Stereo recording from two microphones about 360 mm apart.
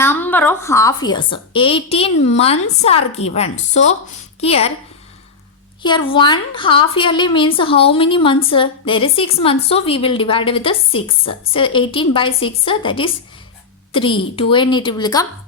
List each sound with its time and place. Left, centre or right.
0.0 s a woman's voice: centre
5.8 s a woman's voice: centre